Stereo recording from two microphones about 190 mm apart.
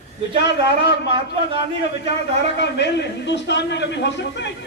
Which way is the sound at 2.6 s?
65° left (ahead or behind).